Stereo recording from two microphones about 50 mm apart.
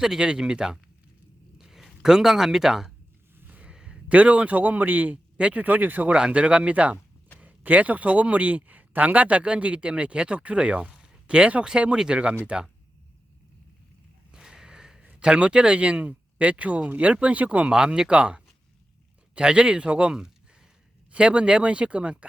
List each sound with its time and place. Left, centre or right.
0.0 s speech: centre
3.3 s a sound: right
3.6 s a sound: centre
4.1 s speech: right
6.1 s speech: centre
14.3 s snort: centre
15.2 s speech: centre
17.7 s speech: centre